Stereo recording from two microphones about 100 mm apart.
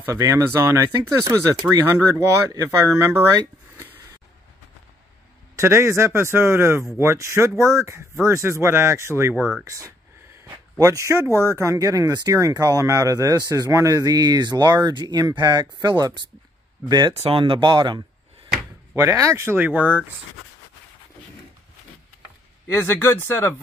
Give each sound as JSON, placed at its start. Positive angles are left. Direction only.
{"t": 0.0, "sound": "speech", "side_deg": -25}
{"t": 1.3, "sound": "speech", "side_deg": -40}
{"t": 5.6, "sound": "speech", "side_deg": -25}
{"t": 9.7, "sound": "a sound", "side_deg": -30}
{"t": 11.5, "sound": "speech", "side_deg": -30}
{"t": 17.1, "sound": "speech", "side_deg": -75}
{"t": 18.9, "sound": "speech", "side_deg": -30}
{"t": 22.7, "sound": "speech", "side_deg": 25}